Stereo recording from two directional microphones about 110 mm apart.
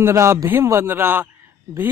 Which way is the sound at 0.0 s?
25° right (ahead or behind).